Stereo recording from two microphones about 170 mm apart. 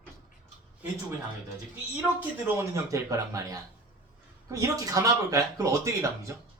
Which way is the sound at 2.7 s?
20° right (ahead or behind).